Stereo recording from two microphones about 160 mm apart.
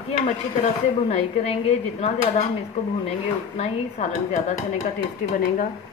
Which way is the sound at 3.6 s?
45° left (ahead or behind).